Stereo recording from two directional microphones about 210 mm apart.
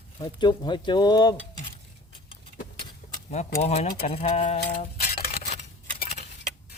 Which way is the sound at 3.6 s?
30° left (ahead or behind).